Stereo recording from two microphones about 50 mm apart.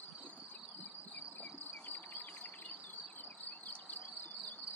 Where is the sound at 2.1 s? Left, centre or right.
Left.